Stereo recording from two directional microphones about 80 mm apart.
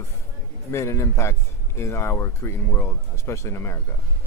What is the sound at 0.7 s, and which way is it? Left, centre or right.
Speech, left.